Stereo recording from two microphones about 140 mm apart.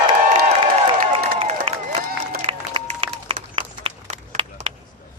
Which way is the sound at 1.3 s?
45° right (ahead or behind).